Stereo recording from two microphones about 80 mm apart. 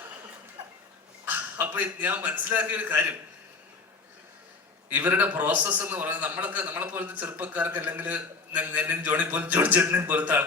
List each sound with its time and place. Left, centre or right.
1.2 s a man's voice: right
4.9 s a man's voice: right